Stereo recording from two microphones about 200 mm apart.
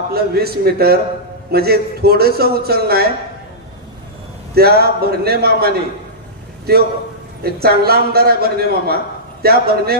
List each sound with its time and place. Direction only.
0.1 s a man's voice: 50° right (ahead or behind)
4.6 s a man's voice: 50° right (ahead or behind)
6.7 s a man's voice: 50° right (ahead or behind)